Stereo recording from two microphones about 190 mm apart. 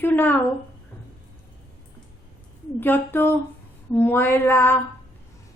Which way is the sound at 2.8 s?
10° left (ahead or behind).